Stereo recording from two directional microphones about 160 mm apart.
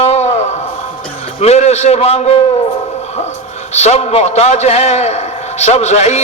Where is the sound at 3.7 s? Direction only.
45° left (ahead or behind).